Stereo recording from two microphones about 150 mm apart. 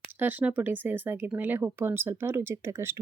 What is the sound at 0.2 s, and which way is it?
Speech, 10° right (ahead or behind).